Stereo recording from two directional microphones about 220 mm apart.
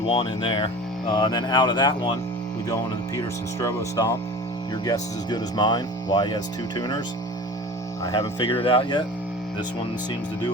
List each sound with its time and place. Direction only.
0.1 s speech: 20° left (ahead or behind)
8.0 s speech: 15° left (ahead or behind)
8.4 s speech: 25° left (ahead or behind)